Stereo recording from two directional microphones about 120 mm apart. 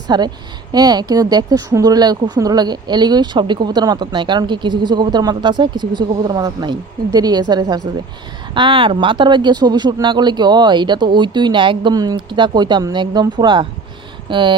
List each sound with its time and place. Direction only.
0.1 s speech: 35° right (ahead or behind)